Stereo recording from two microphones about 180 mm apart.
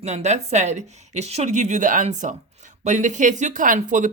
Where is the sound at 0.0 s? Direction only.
40° right (ahead or behind).